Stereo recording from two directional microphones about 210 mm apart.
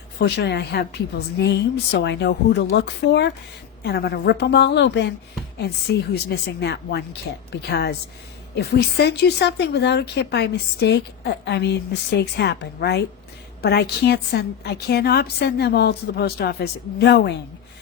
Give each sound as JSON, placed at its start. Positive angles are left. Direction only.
{"t": 0.2, "sound": "a woman's voice", "side_deg": 50}